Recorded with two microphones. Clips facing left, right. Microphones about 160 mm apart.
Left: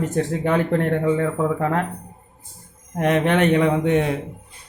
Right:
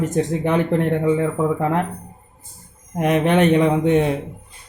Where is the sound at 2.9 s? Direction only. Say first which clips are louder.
Right 2 dB; 15° right (ahead or behind).